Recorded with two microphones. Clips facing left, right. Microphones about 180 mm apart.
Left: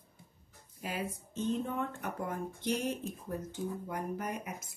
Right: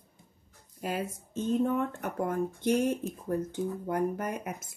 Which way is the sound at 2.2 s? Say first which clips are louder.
Right 8 dB; 50° right (ahead or behind).